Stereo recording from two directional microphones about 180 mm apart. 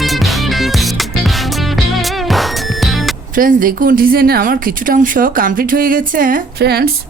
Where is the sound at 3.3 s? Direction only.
50° right (ahead or behind).